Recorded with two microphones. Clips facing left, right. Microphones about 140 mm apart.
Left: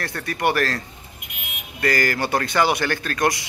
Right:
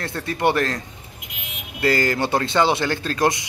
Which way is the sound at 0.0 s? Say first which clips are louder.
Right 2 dB; 25° right (ahead or behind).